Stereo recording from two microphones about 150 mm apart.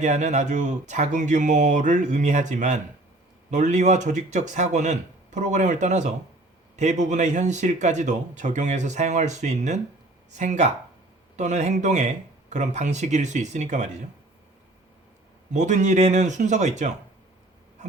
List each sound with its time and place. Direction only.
0.0 s speech: 50° right (ahead or behind)
15.5 s speech: 55° right (ahead or behind)